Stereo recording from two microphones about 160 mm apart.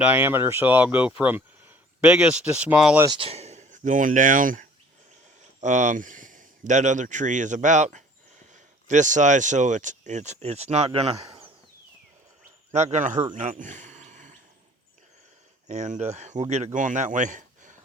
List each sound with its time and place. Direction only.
0.0 s speech: 10° right (ahead or behind)
3.1 s speech: 35° right (ahead or behind)
12.7 s speech: 45° right (ahead or behind)
13.3 s a sound: 50° right (ahead or behind)
15.6 s speech: 45° right (ahead or behind)